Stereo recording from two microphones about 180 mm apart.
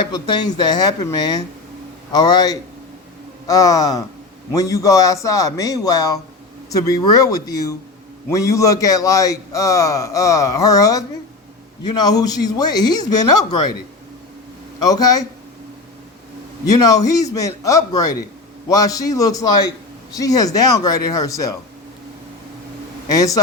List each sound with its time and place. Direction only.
0.1 s a man's voice: 25° left (ahead or behind)
14.8 s speech: 20° left (ahead or behind)
16.6 s speech: 20° left (ahead or behind)
23.0 s speech: 20° left (ahead or behind)